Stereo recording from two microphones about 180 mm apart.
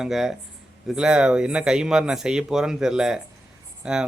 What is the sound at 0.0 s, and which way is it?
Speech, 5° right (ahead or behind).